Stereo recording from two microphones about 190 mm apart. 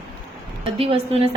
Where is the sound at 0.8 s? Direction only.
30° right (ahead or behind).